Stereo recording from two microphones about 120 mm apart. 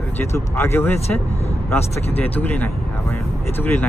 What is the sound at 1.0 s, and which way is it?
Speech, 60° left (ahead or behind).